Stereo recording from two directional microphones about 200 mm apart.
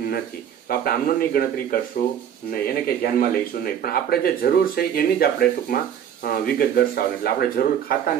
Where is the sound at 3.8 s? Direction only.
50° left (ahead or behind).